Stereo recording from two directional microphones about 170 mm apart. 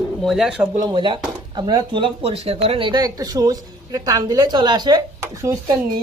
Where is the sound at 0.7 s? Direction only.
25° right (ahead or behind).